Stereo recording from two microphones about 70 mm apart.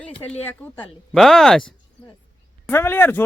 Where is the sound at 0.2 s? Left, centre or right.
Left.